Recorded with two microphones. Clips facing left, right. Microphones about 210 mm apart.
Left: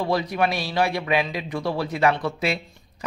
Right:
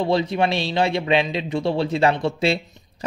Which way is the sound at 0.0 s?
25° right (ahead or behind).